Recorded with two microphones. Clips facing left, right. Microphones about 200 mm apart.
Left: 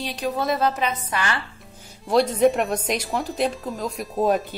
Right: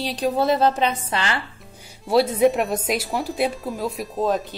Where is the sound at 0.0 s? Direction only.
30° right (ahead or behind).